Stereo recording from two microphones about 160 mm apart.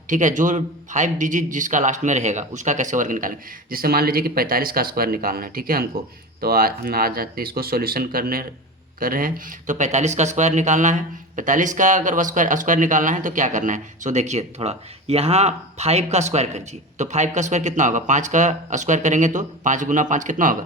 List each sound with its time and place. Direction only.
0.1 s speech: 55° right (ahead or behind)